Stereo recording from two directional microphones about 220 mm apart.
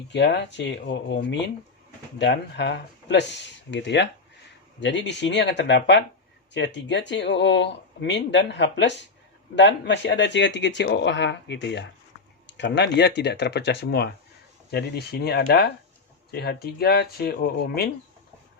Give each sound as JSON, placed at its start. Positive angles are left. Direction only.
{"t": 0.1, "sound": "speech", "side_deg": 50}